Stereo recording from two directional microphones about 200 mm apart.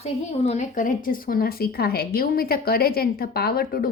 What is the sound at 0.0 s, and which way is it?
Speech, 35° left (ahead or behind).